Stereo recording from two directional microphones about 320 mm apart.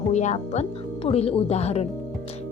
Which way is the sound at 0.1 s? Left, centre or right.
Left.